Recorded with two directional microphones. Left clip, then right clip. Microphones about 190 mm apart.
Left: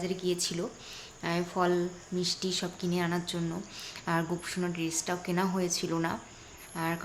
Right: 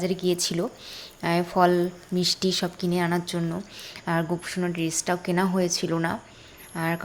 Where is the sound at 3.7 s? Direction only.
15° right (ahead or behind).